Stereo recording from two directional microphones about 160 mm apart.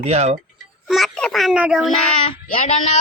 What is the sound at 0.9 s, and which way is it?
A child's voice, centre (ahead or behind).